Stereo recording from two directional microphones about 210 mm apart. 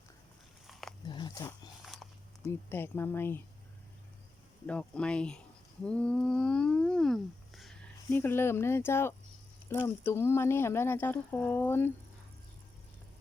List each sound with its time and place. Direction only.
0.7 s dog: centre (ahead or behind)
1.0 s dog: 20° left (ahead or behind)
2.5 s speech: 10° left (ahead or behind)
4.6 s speech: 5° left (ahead or behind)